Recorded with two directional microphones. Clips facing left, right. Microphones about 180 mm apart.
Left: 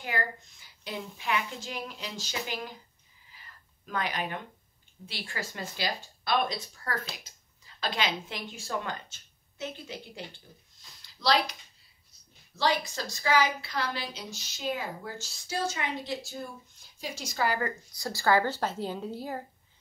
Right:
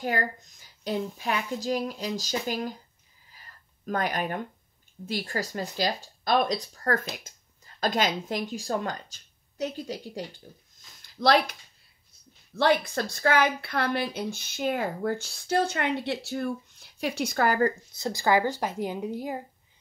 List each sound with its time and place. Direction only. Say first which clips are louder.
0.0 s speech: right 5 dB; 40° right (ahead or behind)
3.3 s a sound: right 1 dB; 45° right (ahead or behind)
5.0 s speech: right 8 dB; 45° right (ahead or behind)
11.0 s a sound: right 5 dB; 50° right (ahead or behind)
12.5 s a woman's voice: right 5 dB; 55° right (ahead or behind)
17.9 s a woman's voice: left 2 dB; 20° right (ahead or behind)